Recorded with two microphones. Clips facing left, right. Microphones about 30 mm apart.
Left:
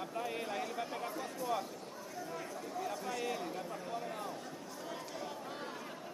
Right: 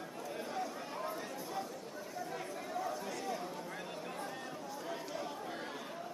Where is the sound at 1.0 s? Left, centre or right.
Centre.